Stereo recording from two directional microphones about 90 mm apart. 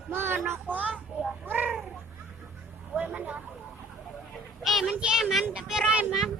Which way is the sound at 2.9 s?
15° right (ahead or behind).